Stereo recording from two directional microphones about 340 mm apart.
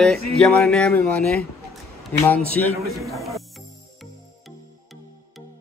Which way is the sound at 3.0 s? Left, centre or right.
Centre.